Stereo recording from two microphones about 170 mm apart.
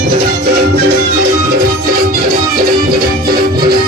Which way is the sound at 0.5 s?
65° right (ahead or behind).